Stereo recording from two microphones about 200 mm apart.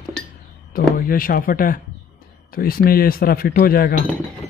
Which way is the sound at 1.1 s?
45° left (ahead or behind).